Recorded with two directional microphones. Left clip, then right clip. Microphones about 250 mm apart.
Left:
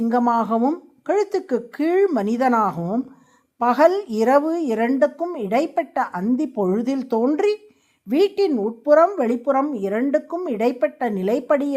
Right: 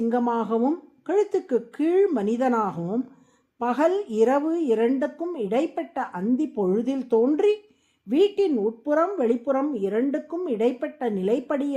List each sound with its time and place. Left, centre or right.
0.1 s speech: centre